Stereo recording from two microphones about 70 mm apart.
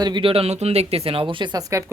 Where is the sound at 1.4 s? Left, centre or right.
Right.